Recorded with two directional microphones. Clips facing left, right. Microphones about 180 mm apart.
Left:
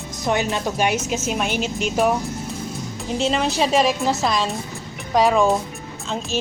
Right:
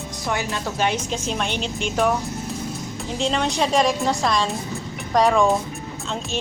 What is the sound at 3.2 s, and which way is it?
Speech, 5° left (ahead or behind).